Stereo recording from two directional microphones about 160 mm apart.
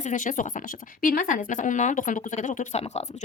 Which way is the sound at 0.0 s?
50° left (ahead or behind).